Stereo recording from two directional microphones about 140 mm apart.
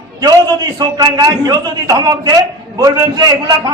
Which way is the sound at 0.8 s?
30° right (ahead or behind).